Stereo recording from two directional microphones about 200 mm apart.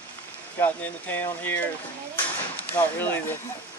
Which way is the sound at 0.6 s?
10° left (ahead or behind).